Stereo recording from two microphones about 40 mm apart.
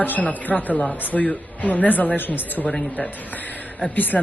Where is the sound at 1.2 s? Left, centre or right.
Left.